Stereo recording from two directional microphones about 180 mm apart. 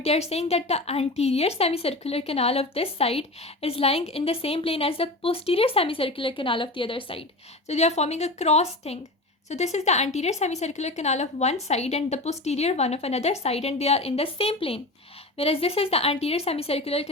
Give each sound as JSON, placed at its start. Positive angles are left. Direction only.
{"t": 0.0, "sound": "a woman's voice", "side_deg": 35}